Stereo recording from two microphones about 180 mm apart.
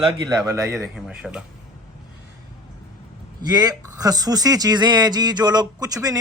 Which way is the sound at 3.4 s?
20° right (ahead or behind).